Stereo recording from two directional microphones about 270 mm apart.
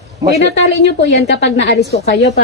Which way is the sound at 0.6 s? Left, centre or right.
Left.